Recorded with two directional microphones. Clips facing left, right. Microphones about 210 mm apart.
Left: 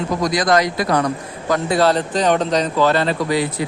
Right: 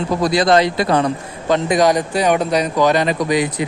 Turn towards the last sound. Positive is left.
turn(degrees=-15)  # may be behind; listen again after turning